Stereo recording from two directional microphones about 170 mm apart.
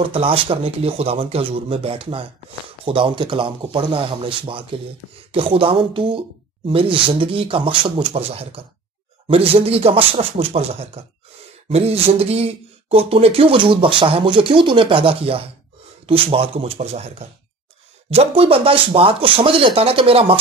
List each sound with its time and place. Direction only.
0.0 s speech: 30° right (ahead or behind)